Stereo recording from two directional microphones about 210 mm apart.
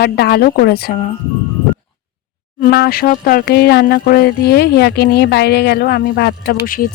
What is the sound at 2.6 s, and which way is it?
Speech, 45° left (ahead or behind).